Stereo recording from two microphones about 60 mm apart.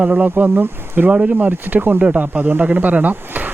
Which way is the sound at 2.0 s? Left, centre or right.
Right.